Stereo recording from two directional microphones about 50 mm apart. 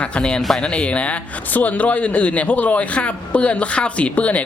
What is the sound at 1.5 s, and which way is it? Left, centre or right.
A man's voice, left.